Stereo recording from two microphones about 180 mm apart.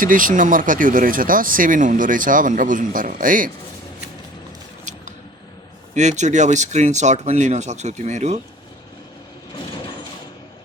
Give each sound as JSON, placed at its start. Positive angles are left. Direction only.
{"t": 0.0, "sound": "speech", "side_deg": -50}
{"t": 4.9, "sound": "scissors", "side_deg": -40}
{"t": 5.9, "sound": "speech", "side_deg": -40}